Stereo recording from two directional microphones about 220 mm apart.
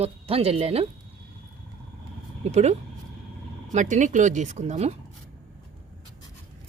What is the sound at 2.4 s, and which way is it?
A woman's voice, 30° right (ahead or behind).